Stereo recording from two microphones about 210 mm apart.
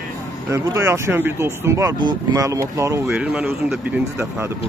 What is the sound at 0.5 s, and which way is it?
Speech, 15° right (ahead or behind).